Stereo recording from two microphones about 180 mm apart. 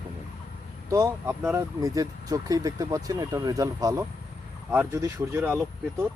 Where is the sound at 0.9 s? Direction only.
15° right (ahead or behind).